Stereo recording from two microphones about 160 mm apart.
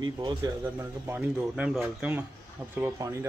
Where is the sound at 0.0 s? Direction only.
30° right (ahead or behind).